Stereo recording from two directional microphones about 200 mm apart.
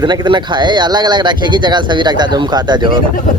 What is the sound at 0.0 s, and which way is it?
Speech, 20° right (ahead or behind).